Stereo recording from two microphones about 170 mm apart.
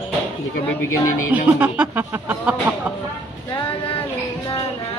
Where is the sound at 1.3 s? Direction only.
10° right (ahead or behind).